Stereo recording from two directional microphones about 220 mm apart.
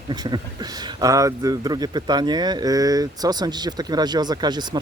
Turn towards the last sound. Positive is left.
turn(degrees=-20)  # may be behind; listen again after turning